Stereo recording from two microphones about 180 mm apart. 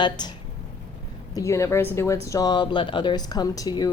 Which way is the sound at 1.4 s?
15° left (ahead or behind).